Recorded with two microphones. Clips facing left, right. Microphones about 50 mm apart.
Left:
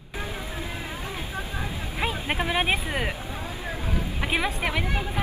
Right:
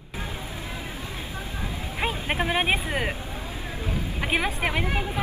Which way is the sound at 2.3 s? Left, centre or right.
Centre.